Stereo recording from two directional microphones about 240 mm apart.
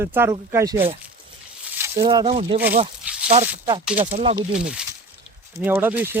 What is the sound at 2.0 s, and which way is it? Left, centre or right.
Speech, right.